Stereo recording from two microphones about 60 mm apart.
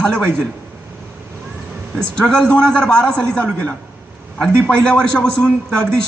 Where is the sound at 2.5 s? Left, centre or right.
Centre.